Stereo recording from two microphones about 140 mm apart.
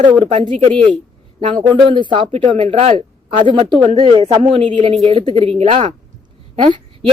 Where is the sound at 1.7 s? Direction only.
35° right (ahead or behind); by 3.0 s 55° right (ahead or behind).